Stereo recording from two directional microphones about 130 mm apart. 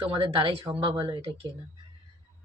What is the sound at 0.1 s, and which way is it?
Speech, 45° right (ahead or behind).